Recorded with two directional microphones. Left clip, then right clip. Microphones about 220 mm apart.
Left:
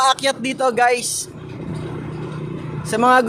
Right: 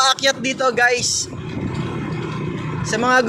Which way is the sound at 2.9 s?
20° left (ahead or behind).